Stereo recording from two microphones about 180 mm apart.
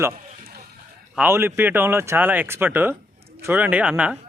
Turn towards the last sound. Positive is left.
turn(degrees=-5)  # may be behind; listen again after turning